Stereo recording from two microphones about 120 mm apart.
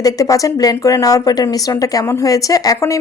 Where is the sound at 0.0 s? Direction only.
30° left (ahead or behind).